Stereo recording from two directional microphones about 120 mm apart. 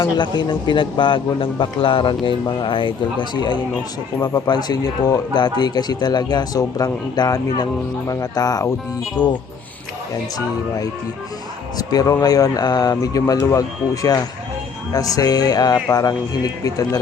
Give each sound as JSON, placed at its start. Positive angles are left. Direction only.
{"t": 0.0, "sound": "speech", "side_deg": 40}
{"t": 11.8, "sound": "speech", "side_deg": 30}